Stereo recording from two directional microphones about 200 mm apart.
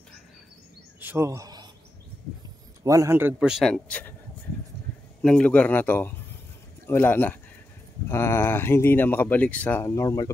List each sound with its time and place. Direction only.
1.0 s bird: 15° right (ahead or behind)
2.8 s speech: 15° right (ahead or behind); by 4.1 s 5° left (ahead or behind)
5.2 s speech: 5° left (ahead or behind)